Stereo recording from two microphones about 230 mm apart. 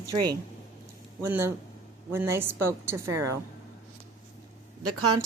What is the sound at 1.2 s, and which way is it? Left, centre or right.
Speech, centre.